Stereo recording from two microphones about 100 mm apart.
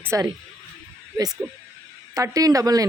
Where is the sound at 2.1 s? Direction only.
35° right (ahead or behind).